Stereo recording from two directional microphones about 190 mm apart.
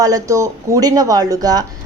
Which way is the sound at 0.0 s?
15° right (ahead or behind).